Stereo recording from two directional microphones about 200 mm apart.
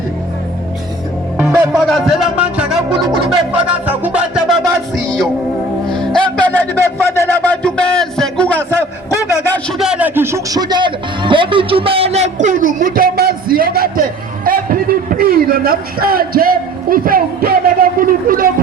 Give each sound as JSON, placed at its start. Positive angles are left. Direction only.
{"t": 1.4, "sound": "music", "side_deg": -10}
{"t": 1.7, "sound": "speech", "side_deg": 0}
{"t": 3.5, "sound": "music", "side_deg": -5}
{"t": 5.9, "sound": "a sound", "side_deg": 5}
{"t": 9.6, "sound": "speech", "side_deg": 0}